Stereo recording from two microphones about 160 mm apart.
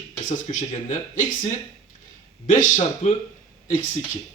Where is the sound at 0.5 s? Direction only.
50° left (ahead or behind).